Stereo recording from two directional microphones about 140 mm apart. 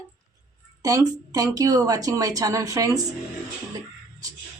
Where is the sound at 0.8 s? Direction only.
25° right (ahead or behind).